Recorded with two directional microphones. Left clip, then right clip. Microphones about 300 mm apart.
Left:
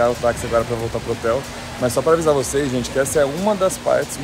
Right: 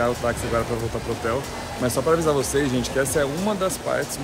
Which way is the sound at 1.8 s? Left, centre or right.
Centre.